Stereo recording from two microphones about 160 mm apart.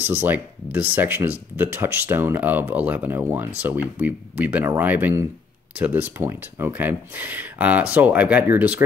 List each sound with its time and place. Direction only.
0.0 s speech: 10° right (ahead or behind)